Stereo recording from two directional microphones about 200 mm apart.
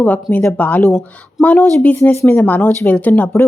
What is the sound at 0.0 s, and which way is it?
A woman's voice, 10° left (ahead or behind).